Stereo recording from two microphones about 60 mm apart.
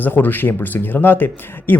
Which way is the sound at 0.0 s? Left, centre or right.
Left.